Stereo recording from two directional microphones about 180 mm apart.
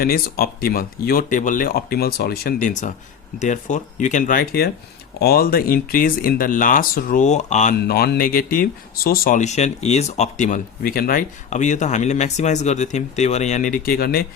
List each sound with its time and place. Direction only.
0.0 s speech: 55° left (ahead or behind)
7.8 s speech: 60° left (ahead or behind)